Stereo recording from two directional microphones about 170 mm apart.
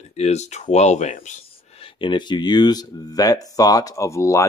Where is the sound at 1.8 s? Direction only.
30° left (ahead or behind).